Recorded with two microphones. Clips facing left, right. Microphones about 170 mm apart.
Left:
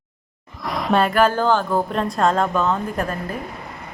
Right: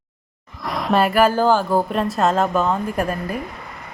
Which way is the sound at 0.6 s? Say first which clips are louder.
Right 1 dB; centre (ahead or behind).